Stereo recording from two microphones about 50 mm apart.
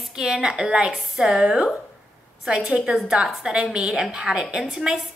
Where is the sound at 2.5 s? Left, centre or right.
Right.